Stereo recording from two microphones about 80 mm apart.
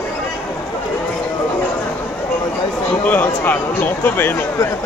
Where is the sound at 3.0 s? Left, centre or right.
Left.